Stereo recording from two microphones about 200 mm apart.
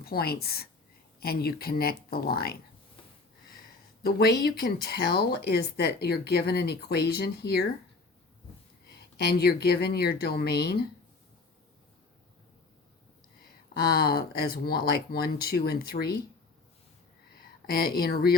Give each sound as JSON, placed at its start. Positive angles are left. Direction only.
{"t": 0.0, "sound": "speech", "side_deg": 50}
{"t": 4.4, "sound": "speech", "side_deg": 50}
{"t": 9.2, "sound": "speech", "side_deg": 55}
{"t": 13.9, "sound": "speech", "side_deg": 50}
{"t": 17.7, "sound": "speech", "side_deg": 50}